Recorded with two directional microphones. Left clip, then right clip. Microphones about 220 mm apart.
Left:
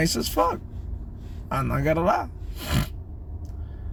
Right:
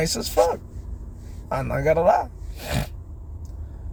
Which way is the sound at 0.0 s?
5° left (ahead or behind).